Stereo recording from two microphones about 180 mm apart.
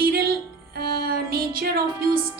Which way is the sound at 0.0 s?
55° right (ahead or behind).